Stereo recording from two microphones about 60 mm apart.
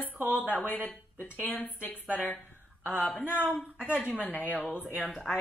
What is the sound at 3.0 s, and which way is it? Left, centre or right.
Speech, left.